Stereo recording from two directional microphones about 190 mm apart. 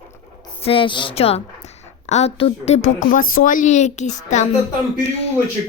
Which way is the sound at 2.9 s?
45° left (ahead or behind).